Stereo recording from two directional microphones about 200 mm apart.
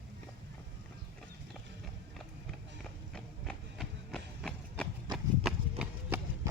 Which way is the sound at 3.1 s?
5° left (ahead or behind).